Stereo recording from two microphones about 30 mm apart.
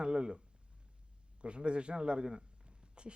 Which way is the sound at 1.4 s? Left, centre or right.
Right.